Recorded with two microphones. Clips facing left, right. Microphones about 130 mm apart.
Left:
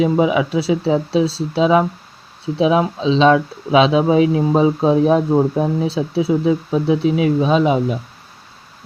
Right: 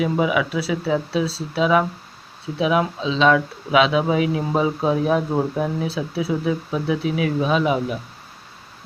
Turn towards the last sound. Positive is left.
turn(degrees=25)  # may be behind; listen again after turning